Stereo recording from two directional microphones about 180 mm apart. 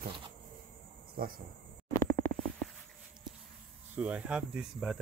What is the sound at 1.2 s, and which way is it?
Speech, 50° right (ahead or behind).